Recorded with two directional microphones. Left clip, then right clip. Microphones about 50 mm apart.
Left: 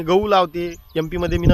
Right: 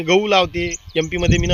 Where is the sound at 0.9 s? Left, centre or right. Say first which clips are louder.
Right 3 dB; left.